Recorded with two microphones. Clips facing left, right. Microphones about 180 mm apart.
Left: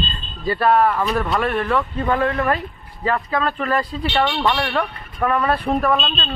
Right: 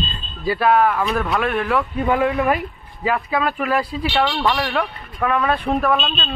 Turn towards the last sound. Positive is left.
turn(degrees=0)  # may be behind; listen again after turning